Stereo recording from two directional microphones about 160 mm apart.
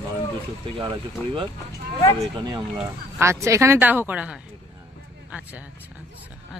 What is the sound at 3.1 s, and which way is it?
Speech, 15° right (ahead or behind).